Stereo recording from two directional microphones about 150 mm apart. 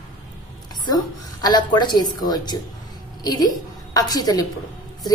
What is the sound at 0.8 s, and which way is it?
A woman's voice, 30° left (ahead or behind).